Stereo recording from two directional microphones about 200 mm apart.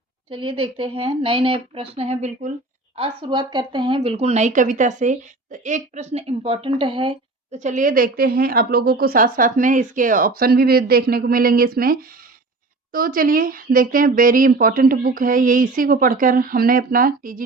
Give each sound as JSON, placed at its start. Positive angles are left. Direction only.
{"t": 0.3, "sound": "a woman's voice", "side_deg": -25}